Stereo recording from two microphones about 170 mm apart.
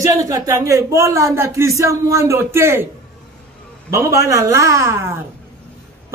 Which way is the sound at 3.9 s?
15° right (ahead or behind).